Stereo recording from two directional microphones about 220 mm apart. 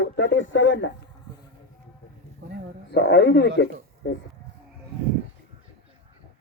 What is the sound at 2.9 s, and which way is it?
Speech, 50° left (ahead or behind).